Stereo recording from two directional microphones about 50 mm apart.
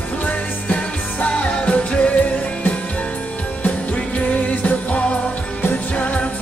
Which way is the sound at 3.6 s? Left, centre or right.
Left.